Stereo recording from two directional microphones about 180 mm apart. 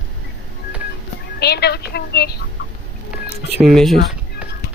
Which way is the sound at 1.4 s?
65° left (ahead or behind).